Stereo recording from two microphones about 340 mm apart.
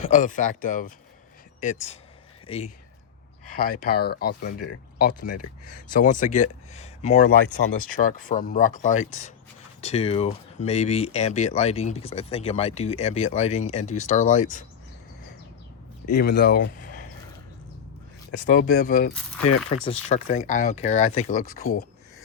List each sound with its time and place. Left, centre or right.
0.0 s speech: left
3.6 s speech: left
16.1 s speech: left
18.4 s speech: left